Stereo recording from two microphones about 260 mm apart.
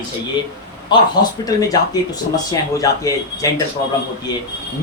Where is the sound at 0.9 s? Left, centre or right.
Centre.